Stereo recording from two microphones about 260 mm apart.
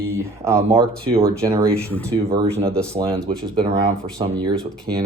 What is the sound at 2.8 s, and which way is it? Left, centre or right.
Speech, centre.